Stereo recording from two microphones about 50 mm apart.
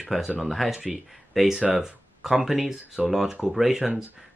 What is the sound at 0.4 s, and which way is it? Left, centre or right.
Speech, centre.